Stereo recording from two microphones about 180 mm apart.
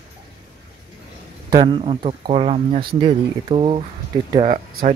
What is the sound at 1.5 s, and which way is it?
Speech, 30° right (ahead or behind).